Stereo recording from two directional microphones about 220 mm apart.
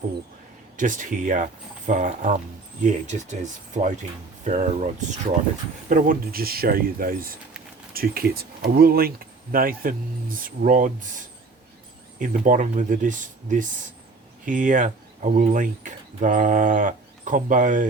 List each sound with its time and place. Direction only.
0.8 s speech: 35° right (ahead or behind)